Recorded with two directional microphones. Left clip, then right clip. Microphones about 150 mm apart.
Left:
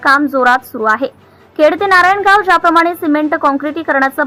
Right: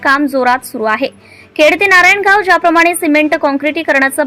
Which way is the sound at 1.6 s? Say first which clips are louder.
Right 2 dB; 55° right (ahead or behind).